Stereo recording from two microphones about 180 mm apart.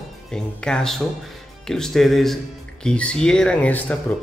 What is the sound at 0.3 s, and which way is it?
Speech, 5° left (ahead or behind).